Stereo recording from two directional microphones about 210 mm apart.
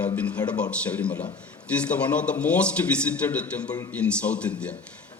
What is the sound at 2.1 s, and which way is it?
Speech, 5° left (ahead or behind).